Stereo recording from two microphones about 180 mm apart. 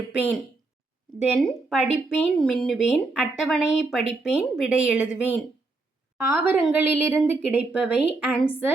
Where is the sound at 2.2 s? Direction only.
5° left (ahead or behind).